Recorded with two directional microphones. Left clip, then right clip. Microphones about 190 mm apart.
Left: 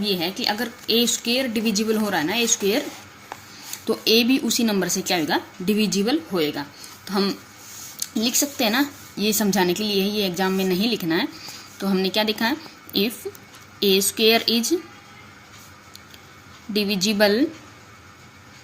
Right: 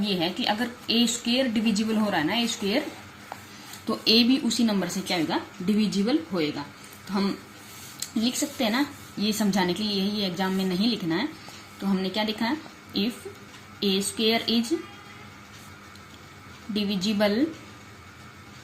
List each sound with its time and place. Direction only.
0.0 s a woman's voice: 25° left (ahead or behind)
3.8 s a woman's voice: 35° left (ahead or behind)
8.2 s a woman's voice: 40° left (ahead or behind)
16.7 s speech: 45° left (ahead or behind)